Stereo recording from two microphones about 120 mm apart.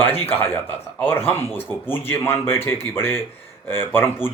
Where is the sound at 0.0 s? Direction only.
20° left (ahead or behind).